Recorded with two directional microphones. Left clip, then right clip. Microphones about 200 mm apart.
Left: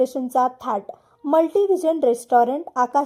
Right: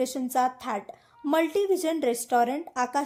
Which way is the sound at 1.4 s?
15° right (ahead or behind).